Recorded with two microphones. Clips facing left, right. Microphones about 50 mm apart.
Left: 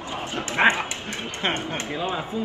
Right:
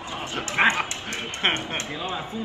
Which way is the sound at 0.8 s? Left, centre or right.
Right.